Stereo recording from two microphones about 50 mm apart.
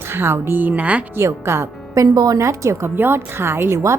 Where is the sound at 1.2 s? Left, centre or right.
Right.